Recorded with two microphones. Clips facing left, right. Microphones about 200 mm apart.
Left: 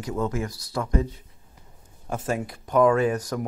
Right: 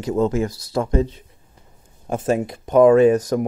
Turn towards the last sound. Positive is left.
turn(degrees=-20)  # may be behind; listen again after turning